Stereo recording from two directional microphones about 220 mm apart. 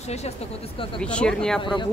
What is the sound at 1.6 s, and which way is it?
Speech, 20° left (ahead or behind).